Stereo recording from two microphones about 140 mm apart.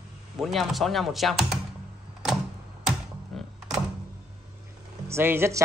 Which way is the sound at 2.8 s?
Centre (ahead or behind).